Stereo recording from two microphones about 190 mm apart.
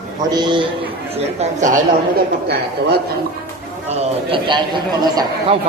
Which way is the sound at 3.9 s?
30° right (ahead or behind).